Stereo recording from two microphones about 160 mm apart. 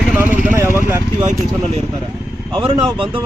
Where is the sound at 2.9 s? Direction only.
35° right (ahead or behind).